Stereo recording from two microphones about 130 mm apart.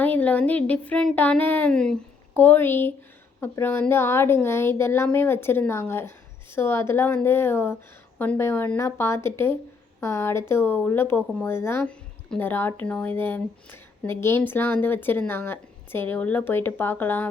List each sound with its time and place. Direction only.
0.0 s a woman's voice: 10° left (ahead or behind)